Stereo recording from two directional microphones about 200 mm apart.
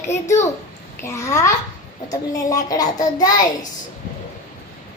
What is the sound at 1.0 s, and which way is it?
A child's voice, 15° left (ahead or behind).